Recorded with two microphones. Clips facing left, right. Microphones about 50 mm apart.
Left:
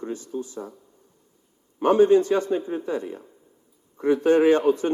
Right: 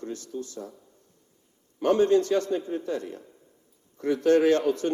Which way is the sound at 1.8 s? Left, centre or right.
Centre.